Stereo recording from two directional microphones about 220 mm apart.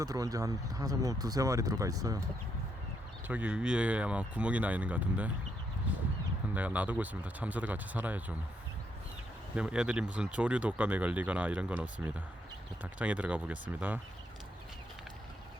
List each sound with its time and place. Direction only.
0.0 s speech: 15° right (ahead or behind)
3.2 s speech: 5° right (ahead or behind)
6.5 s speech: 5° right (ahead or behind)
9.6 s speech: 5° right (ahead or behind)